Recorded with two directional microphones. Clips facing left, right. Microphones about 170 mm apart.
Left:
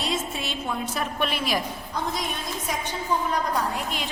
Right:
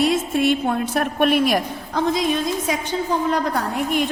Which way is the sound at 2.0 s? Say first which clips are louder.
Right 10 dB; 90° right.